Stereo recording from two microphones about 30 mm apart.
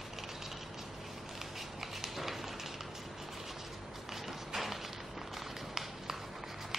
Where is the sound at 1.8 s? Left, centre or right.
Centre.